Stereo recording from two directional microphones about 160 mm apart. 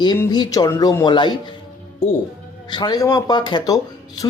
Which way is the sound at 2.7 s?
25° left (ahead or behind).